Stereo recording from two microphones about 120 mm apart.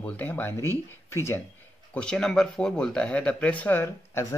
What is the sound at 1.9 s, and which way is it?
Speech, 5° left (ahead or behind).